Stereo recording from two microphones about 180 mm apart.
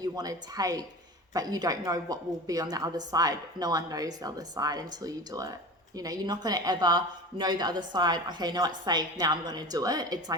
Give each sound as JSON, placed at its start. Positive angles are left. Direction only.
{"t": 0.0, "sound": "a woman's voice", "side_deg": -20}